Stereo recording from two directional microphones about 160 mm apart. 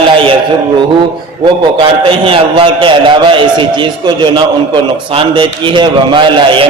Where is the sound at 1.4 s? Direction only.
30° right (ahead or behind).